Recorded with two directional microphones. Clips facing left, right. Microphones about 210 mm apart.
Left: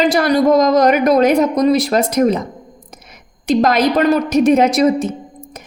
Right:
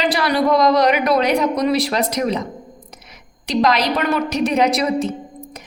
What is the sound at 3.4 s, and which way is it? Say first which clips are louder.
A woman's voice: left 4 dB; 50° left (ahead or behind).